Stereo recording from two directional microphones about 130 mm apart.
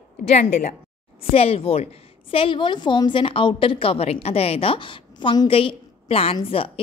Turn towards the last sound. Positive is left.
turn(degrees=45)  # may be behind; listen again after turning